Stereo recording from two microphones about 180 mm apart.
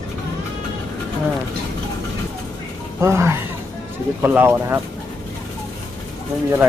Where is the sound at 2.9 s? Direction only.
15° right (ahead or behind).